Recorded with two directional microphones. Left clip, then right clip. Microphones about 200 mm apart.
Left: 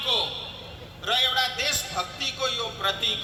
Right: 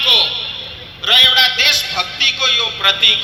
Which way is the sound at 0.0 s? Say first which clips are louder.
Right 13 dB; 50° left (ahead or behind).